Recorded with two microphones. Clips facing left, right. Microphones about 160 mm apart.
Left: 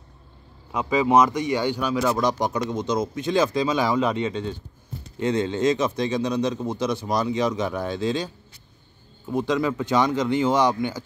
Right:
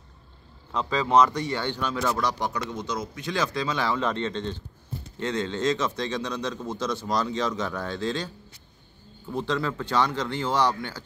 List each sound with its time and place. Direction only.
0.7 s a man's voice: 15° left (ahead or behind)
9.3 s a man's voice: 15° left (ahead or behind)